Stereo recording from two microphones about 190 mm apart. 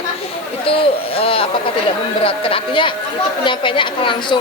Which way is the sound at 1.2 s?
30° left (ahead or behind).